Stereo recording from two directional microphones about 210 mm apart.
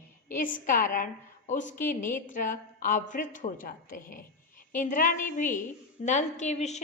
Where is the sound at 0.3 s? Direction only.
40° left (ahead or behind).